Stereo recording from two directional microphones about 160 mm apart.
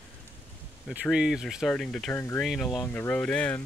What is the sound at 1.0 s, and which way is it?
Speech, 5° right (ahead or behind).